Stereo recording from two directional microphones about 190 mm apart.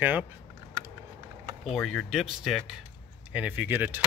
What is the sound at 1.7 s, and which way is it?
Speech, centre (ahead or behind).